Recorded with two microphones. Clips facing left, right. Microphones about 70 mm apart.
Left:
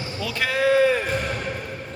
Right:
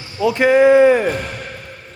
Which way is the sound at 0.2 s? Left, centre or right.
Right.